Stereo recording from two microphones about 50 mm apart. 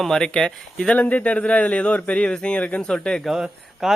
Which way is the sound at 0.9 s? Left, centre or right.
Left.